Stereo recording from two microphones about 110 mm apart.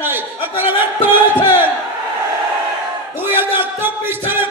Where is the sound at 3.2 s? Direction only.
20° right (ahead or behind).